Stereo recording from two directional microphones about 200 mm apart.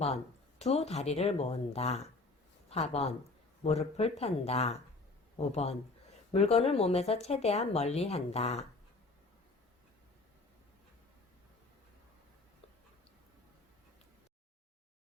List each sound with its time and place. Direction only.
0.6 s speech: 30° left (ahead or behind)